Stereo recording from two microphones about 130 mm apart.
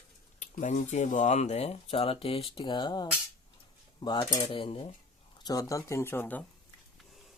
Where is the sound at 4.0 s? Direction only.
35° left (ahead or behind).